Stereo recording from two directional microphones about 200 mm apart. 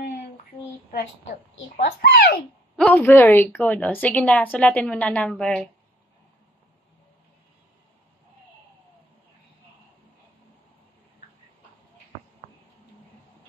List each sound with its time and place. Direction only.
1.8 s a child's voice: 50° left (ahead or behind)
2.7 s a woman's voice: 5° left (ahead or behind)